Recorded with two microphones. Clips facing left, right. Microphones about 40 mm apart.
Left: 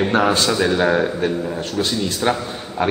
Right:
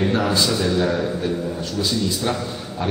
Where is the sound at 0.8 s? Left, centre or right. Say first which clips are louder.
Left 4 dB; left.